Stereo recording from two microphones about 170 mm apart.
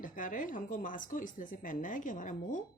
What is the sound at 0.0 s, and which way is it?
Speech, 50° left (ahead or behind).